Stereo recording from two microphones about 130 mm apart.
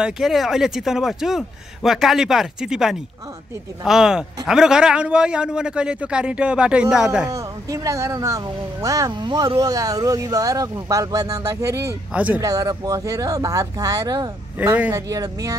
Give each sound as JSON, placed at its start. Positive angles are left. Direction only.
{"t": 0.0, "sound": "a man's voice", "side_deg": -5}
{"t": 7.2, "sound": "speech", "side_deg": -25}
{"t": 9.1, "sound": "speech", "side_deg": -35}
{"t": 12.1, "sound": "a man's voice", "side_deg": -10}
{"t": 12.4, "sound": "speech", "side_deg": -25}
{"t": 14.6, "sound": "a man's voice", "side_deg": -10}
{"t": 14.9, "sound": "speech", "side_deg": -25}